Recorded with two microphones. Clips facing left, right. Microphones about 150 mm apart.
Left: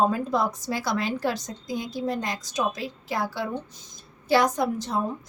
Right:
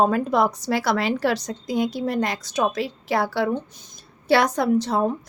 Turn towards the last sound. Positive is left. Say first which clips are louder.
# right 6 dB
turn(degrees=-75)  # may be behind; listen again after turning